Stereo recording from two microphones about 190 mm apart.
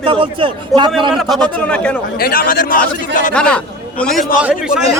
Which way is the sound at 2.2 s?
50° left (ahead or behind).